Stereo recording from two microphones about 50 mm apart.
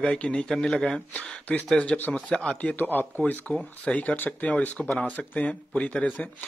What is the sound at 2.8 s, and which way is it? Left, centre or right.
Speech, left.